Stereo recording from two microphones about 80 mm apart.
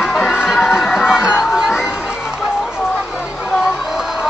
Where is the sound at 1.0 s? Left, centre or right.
Centre.